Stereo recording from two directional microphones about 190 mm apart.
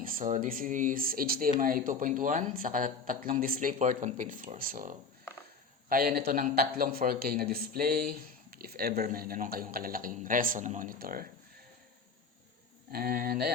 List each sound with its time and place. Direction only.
0.0 s a man's voice: 45° right (ahead or behind)
12.9 s a man's voice: 50° right (ahead or behind)